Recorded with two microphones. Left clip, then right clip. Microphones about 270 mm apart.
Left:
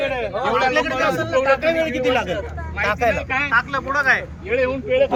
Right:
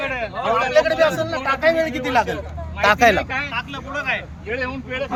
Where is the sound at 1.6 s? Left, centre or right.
Right.